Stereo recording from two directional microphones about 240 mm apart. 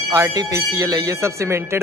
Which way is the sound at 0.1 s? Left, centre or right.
Centre.